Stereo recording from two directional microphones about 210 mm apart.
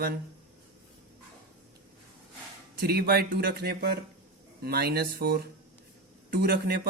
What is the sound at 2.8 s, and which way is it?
Speech, 50° right (ahead or behind).